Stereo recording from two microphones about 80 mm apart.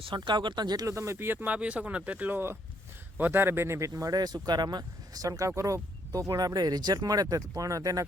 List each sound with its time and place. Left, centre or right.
0.1 s speech: right
0.9 s speech: right
1.5 s speech: centre; by 8.0 s right